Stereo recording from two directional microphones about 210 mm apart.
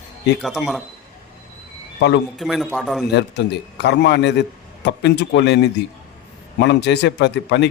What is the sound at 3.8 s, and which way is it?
A man's voice, 55° left (ahead or behind).